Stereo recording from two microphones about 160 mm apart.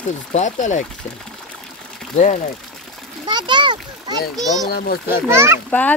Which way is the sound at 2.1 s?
50° left (ahead or behind).